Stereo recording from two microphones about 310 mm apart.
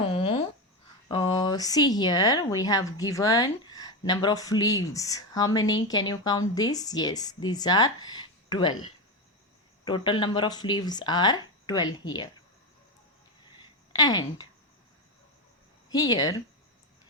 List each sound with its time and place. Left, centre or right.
0.1 s toothbrush: centre
1.0 s speech: centre
9.8 s speech: centre
13.9 s speech: centre
15.9 s speech: centre